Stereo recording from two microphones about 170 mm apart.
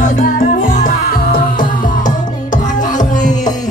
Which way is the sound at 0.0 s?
55° left (ahead or behind).